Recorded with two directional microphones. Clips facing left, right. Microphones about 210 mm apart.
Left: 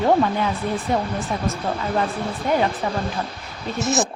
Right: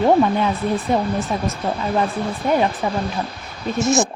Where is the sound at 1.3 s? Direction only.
20° right (ahead or behind).